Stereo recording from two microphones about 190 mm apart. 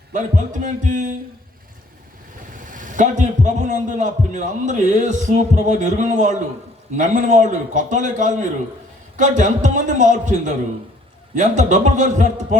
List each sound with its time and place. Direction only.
0.1 s speech: 40° right (ahead or behind)
2.7 s a man's voice: 45° right (ahead or behind)